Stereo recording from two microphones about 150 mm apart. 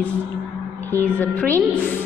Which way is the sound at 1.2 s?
10° left (ahead or behind).